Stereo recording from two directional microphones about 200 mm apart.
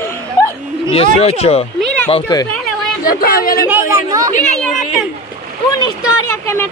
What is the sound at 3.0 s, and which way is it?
Speech, 45° left (ahead or behind).